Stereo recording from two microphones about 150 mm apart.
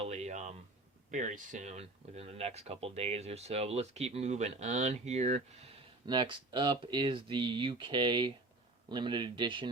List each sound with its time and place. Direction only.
0.0 s a sound: 50° right (ahead or behind)
1.1 s speech: 60° right (ahead or behind)
6.1 s speech: 30° right (ahead or behind)